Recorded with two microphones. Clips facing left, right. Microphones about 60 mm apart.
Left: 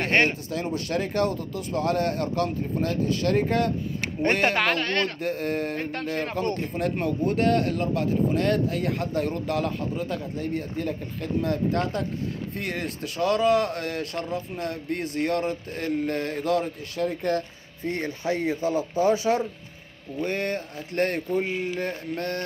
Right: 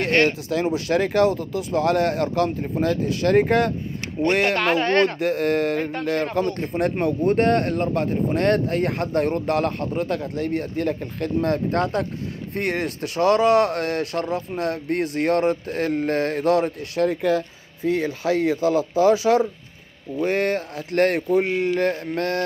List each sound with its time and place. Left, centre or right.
0.5 s speech: right
4.2 s speech: left
4.8 s speech: right
5.2 s speech: right
6.7 s speech: right
20.2 s speech: right